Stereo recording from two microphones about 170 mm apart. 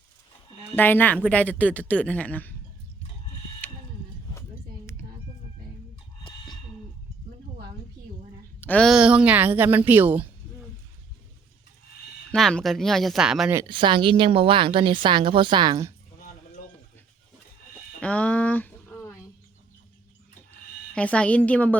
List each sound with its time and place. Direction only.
0.8 s speech: 10° left (ahead or behind)
3.6 s a sound: 10° left (ahead or behind)
6.2 s bird: 25° left (ahead or behind)
8.6 s speech: 5° left (ahead or behind); by 10.2 s 10° right (ahead or behind)
12.3 s speech: 5° left (ahead or behind)
13.7 s a woman's voice: 30° right (ahead or behind)
18.0 s a sound: 5° left (ahead or behind)
20.9 s speech: 5° left (ahead or behind)